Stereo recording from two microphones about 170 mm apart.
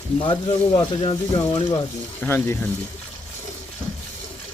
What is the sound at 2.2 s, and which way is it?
Speech, 15° left (ahead or behind).